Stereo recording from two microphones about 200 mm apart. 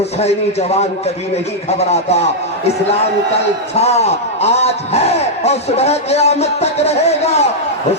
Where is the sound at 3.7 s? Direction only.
30° left (ahead or behind).